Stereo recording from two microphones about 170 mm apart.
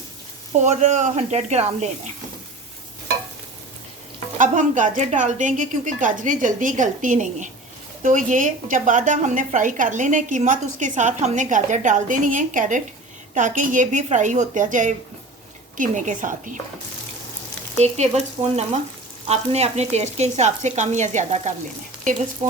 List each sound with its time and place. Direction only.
0.6 s a woman's voice: 45° right (ahead or behind)
4.4 s a woman's voice: 50° right (ahead or behind)
17.7 s speech: 40° right (ahead or behind)